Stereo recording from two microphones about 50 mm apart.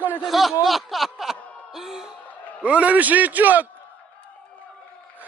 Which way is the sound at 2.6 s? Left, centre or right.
Right.